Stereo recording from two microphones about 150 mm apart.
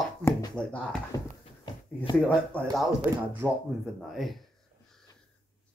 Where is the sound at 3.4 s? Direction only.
15° right (ahead or behind).